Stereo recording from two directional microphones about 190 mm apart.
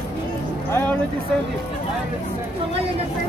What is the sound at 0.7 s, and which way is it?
Music, 10° left (ahead or behind).